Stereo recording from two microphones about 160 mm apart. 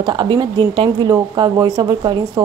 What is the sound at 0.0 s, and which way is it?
Speech, 30° right (ahead or behind).